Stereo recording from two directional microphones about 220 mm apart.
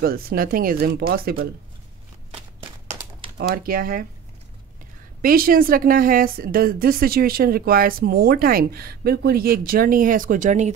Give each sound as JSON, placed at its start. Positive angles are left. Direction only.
{"t": 0.0, "sound": "speech", "side_deg": -40}
{"t": 3.3, "sound": "a woman's voice", "side_deg": -40}
{"t": 5.2, "sound": "a woman's voice", "side_deg": -40}